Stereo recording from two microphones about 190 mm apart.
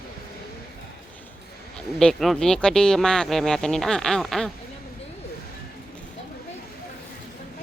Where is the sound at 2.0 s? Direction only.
Centre (ahead or behind).